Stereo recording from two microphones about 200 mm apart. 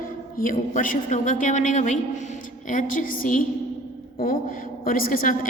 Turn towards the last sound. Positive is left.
turn(degrees=45)  # may be behind; listen again after turning